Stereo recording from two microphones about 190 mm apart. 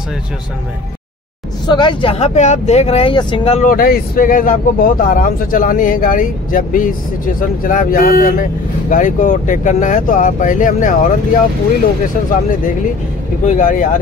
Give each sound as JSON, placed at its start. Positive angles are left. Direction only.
{"t": 1.7, "sound": "speech", "side_deg": 25}
{"t": 3.6, "sound": "speech", "side_deg": 50}
{"t": 13.5, "sound": "speech", "side_deg": 45}